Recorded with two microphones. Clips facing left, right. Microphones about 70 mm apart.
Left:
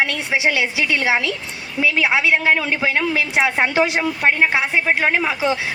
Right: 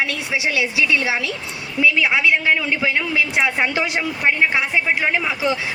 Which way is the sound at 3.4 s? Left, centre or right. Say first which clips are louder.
Left 3 dB; left.